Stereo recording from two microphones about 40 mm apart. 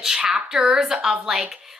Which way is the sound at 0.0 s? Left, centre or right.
Centre.